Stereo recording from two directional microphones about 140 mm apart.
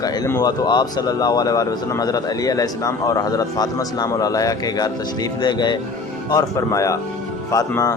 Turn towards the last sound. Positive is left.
turn(degrees=25)  # may be behind; listen again after turning